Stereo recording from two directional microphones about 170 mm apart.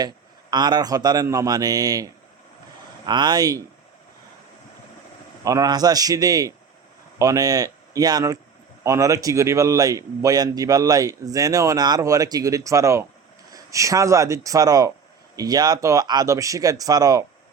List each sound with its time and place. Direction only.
0.5 s a man's voice: 25° right (ahead or behind)
3.1 s a man's voice: 25° right (ahead or behind)
5.5 s a man's voice: 20° right (ahead or behind)